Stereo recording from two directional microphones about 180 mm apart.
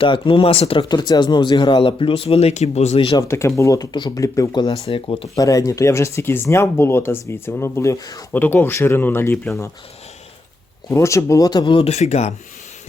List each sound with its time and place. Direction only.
0.0 s speech: 30° left (ahead or behind)
3.2 s speech: 15° left (ahead or behind); by 5.3 s 30° left (ahead or behind)
5.4 s speech: 20° left (ahead or behind)
10.8 s speech: 15° left (ahead or behind); by 12.3 s 40° left (ahead or behind)